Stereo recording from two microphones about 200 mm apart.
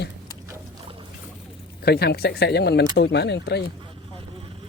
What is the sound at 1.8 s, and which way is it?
Speech, 50° left (ahead or behind).